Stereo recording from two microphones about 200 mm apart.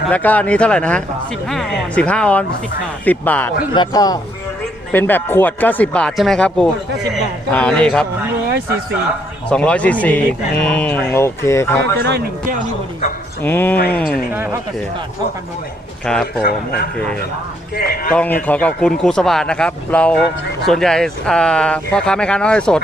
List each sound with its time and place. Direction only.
0.1 s speech: 10° left (ahead or behind)
3.8 s speech: 20° left (ahead or behind)
9.5 s speech: 5° left (ahead or behind)
11.9 s speech: 55° right (ahead or behind)
13.4 s speech: 10° left (ahead or behind)
14.3 s speech: 10° right (ahead or behind)
16.0 s speech: 5° left (ahead or behind)
16.4 s a man's voice: 50° left (ahead or behind)
18.1 s speech: 5° left (ahead or behind)